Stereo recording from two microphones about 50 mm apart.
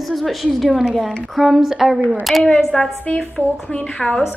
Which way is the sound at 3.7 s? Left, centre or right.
Centre.